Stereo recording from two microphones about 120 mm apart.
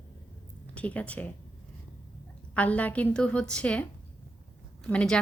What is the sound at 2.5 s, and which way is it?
A woman's voice, 10° left (ahead or behind).